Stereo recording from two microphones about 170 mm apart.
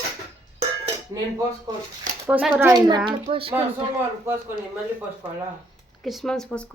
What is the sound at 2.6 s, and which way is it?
Speech, 25° right (ahead or behind).